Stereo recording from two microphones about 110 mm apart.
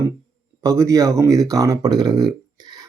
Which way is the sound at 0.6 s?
30° right (ahead or behind).